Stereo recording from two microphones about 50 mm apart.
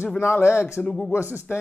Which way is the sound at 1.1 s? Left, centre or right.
Right.